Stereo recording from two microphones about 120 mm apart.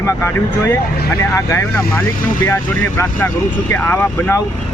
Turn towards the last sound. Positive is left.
turn(degrees=15)  # may be behind; listen again after turning